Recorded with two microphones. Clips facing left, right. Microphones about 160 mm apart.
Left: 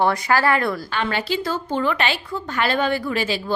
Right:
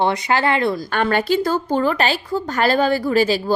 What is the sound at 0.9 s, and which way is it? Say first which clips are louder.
A woman's voice: right 6 dB; 50° right (ahead or behind).